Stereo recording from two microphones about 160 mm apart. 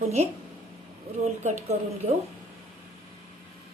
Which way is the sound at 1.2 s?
45° right (ahead or behind).